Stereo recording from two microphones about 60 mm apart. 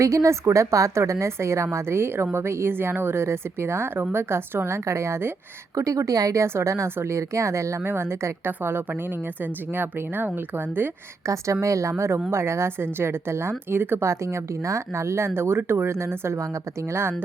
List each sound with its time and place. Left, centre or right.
0.0 s a woman's voice: right
5.7 s speech: right
6.4 s a woman's voice: right
7.9 s a woman's voice: right
11.6 s a woman's voice: right
14.1 s a woman's voice: right